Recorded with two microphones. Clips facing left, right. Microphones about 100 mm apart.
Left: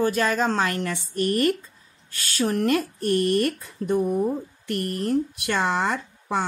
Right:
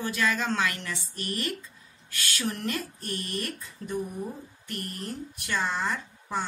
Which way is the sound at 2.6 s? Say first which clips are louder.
Left 11 dB; 60° left (ahead or behind).